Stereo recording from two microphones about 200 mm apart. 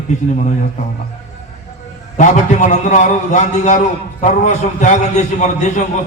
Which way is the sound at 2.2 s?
40° left (ahead or behind).